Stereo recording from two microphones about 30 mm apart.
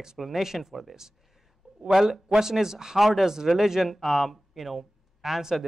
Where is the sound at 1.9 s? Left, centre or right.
Centre.